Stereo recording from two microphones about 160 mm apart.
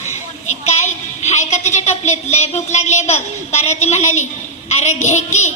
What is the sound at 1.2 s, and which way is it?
A woman's voice, 45° left (ahead or behind).